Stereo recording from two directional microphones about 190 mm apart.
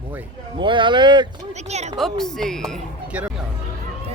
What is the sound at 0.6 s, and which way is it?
Speech, 25° right (ahead or behind).